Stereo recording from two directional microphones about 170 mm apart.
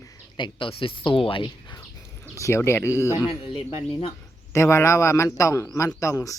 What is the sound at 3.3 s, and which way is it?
Speech, 30° left (ahead or behind).